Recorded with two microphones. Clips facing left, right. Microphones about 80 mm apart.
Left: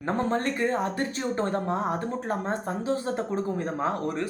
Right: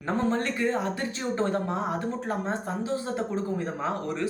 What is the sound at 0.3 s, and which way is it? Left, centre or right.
Speech, left.